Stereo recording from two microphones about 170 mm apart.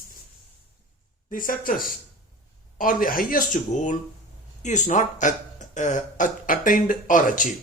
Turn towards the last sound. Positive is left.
turn(degrees=50)  # may be behind; listen again after turning